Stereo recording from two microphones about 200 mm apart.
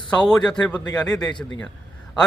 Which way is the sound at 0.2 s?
5° left (ahead or behind).